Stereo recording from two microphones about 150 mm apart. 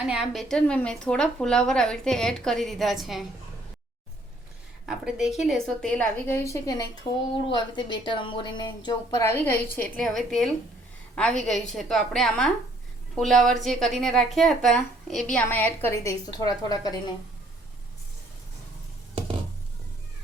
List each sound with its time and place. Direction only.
0.0 s a woman's voice: 5° right (ahead or behind)
4.9 s a woman's voice: 5° right (ahead or behind); by 16.9 s 25° left (ahead or behind)